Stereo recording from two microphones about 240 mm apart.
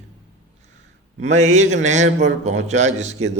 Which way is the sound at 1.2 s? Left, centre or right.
Right.